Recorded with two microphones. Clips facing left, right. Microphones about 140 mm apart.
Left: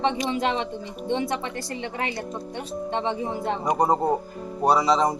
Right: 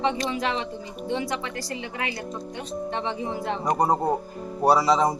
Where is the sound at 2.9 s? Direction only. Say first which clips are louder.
Left 4 dB; 20° left (ahead or behind).